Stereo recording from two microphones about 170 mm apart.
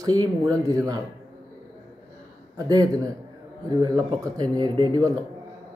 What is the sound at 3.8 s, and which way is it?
Speech, 25° right (ahead or behind).